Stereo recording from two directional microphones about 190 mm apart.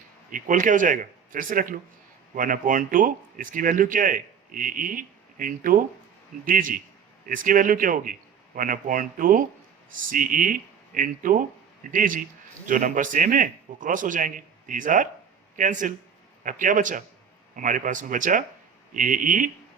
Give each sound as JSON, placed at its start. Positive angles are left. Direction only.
{"t": 0.3, "sound": "speech", "side_deg": -45}